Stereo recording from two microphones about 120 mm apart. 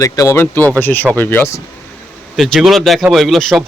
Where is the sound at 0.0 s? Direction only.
25° left (ahead or behind).